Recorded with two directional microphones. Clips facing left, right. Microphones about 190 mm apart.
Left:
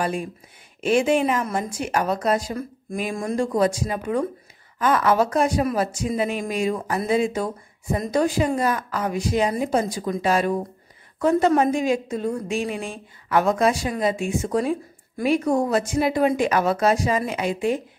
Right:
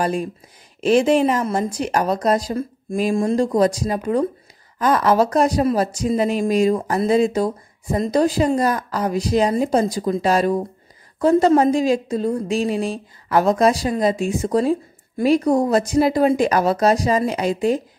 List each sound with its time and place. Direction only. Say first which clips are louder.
0.7 s a woman's voice: right 4 dB; 35° right (ahead or behind)